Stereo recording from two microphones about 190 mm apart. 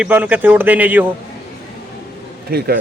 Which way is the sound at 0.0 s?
10° right (ahead or behind).